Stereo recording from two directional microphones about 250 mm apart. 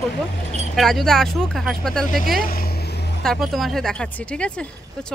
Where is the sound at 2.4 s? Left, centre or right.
Left.